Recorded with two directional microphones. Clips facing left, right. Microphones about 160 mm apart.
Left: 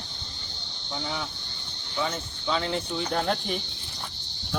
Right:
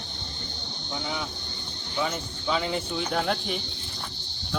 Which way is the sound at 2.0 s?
5° right (ahead or behind).